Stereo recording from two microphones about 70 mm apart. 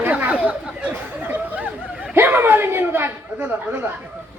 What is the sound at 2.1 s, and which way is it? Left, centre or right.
Speech, right.